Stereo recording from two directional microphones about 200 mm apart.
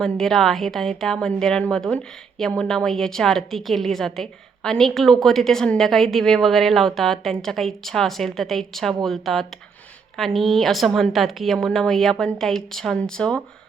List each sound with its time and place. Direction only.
0.0 s a woman's voice: centre (ahead or behind)